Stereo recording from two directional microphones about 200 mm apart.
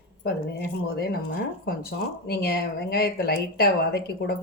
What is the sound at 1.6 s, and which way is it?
Speech, 50° left (ahead or behind).